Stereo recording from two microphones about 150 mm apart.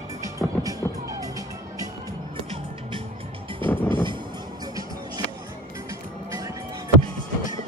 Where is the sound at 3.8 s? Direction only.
30° right (ahead or behind).